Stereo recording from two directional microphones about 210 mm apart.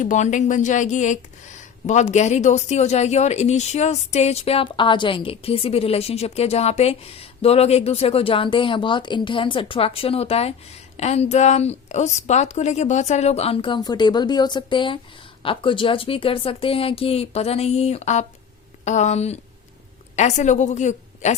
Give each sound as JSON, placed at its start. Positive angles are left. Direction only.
{"t": 0.0, "sound": "a woman's voice", "side_deg": 35}